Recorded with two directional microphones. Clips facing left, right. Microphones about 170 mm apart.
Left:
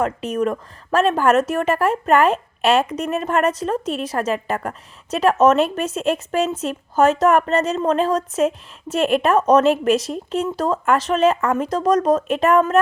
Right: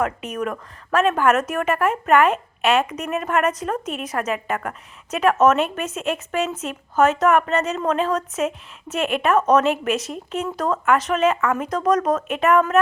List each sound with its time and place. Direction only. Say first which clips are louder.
0.0 s a woman's voice: left 4 dB; 30° left (ahead or behind)